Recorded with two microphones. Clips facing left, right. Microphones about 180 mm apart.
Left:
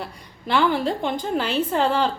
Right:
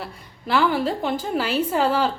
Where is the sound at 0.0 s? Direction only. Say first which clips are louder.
Left 1 dB; 5° right (ahead or behind).